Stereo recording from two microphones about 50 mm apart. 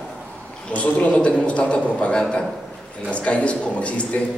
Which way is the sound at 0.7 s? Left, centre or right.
Left.